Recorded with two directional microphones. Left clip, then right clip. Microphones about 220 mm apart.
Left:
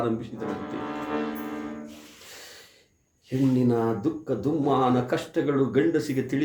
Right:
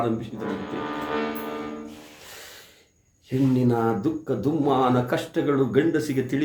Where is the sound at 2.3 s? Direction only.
Centre (ahead or behind).